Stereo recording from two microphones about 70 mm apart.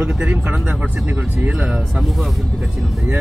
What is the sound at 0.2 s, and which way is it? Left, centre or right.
Speech, right.